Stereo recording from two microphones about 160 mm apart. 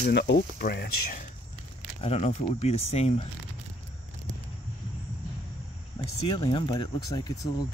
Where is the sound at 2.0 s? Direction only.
45° left (ahead or behind).